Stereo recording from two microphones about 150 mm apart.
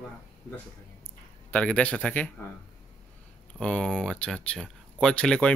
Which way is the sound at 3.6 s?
5° left (ahead or behind).